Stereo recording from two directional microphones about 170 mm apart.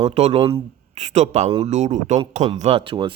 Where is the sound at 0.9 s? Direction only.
40° right (ahead or behind).